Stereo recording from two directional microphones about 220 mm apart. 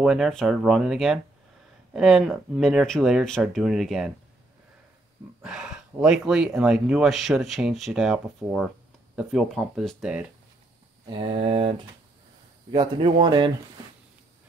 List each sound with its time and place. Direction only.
0.0 s speech: centre (ahead or behind)
5.4 s speech: 5° right (ahead or behind)
11.1 s speech: 25° right (ahead or behind)
12.7 s speech: 20° right (ahead or behind)